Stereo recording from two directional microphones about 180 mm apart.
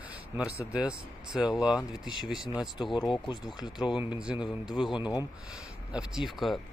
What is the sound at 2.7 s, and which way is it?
Speech, 25° left (ahead or behind).